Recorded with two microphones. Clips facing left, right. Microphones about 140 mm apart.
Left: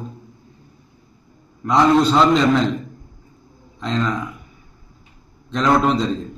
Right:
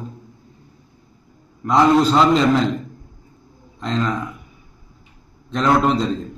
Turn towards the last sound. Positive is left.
turn(degrees=0)  # may be behind; listen again after turning